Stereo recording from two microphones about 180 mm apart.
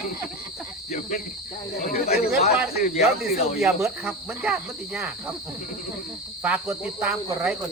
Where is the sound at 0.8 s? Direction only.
45° left (ahead or behind).